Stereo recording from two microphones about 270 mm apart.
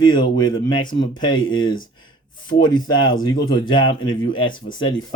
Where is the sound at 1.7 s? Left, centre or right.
Left.